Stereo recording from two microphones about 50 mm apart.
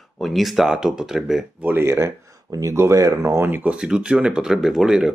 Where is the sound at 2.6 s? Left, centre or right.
Right.